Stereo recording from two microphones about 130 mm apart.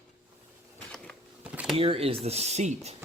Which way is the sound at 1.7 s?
45° right (ahead or behind).